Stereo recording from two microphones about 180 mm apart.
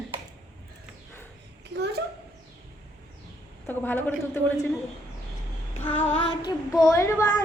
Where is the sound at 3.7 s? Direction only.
10° left (ahead or behind).